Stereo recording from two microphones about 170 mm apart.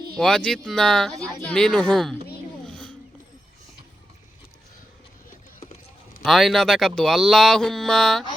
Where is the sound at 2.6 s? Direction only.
5° left (ahead or behind).